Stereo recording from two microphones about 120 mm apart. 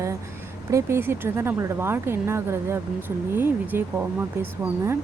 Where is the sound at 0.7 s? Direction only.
20° right (ahead or behind).